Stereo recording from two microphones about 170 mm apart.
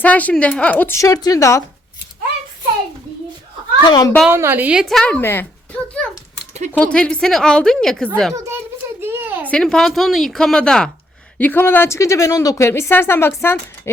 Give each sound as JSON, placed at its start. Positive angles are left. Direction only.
{"t": 0.0, "sound": "a woman's voice", "side_deg": 10}
{"t": 3.8, "sound": "a child's voice", "side_deg": 25}
{"t": 4.3, "sound": "a woman's voice", "side_deg": -15}
{"t": 9.0, "sound": "a sound", "side_deg": -15}
{"t": 9.5, "sound": "a woman's voice", "side_deg": 5}